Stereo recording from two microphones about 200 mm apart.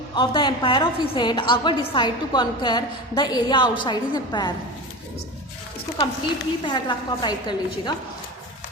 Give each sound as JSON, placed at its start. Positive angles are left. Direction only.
{"t": 0.2, "sound": "a woman's voice", "side_deg": 25}
{"t": 6.7, "sound": "a woman's voice", "side_deg": 25}